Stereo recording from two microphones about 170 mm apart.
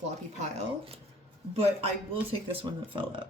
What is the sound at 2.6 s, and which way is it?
Speech, 30° right (ahead or behind).